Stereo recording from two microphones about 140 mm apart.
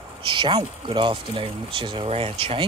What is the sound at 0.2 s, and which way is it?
Speech, 35° right (ahead or behind).